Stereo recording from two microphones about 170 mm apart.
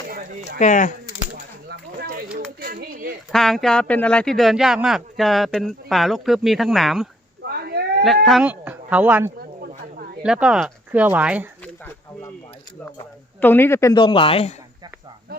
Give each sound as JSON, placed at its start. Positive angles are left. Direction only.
{"t": 0.1, "sound": "a sound", "side_deg": -60}
{"t": 0.6, "sound": "speech", "side_deg": 50}
{"t": 1.7, "sound": "a sound", "side_deg": -60}
{"t": 2.6, "sound": "speech", "side_deg": -60}
{"t": 3.3, "sound": "a man's voice", "side_deg": 0}
{"t": 7.4, "sound": "a sound", "side_deg": -65}
{"t": 8.0, "sound": "speech", "side_deg": 0}
{"t": 13.4, "sound": "speech", "side_deg": 10}
{"t": 13.9, "sound": "speech", "side_deg": 30}